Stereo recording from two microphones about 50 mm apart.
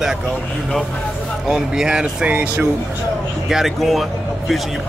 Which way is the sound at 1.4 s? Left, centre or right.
Centre.